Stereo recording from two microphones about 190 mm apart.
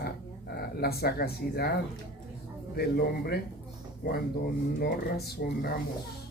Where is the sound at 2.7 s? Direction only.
55° left (ahead or behind).